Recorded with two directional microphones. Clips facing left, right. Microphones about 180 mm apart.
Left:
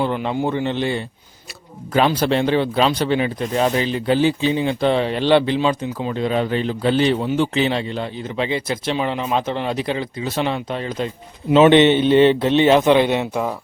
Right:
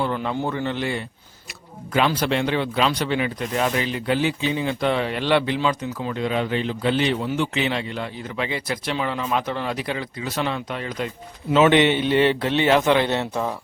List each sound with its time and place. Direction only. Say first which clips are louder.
0.0 s speech: left 4 dB; 20° left (ahead or behind)
2.0 s a man's voice: left 4 dB; 30° left (ahead or behind); by 13.5 s 10° left (ahead or behind)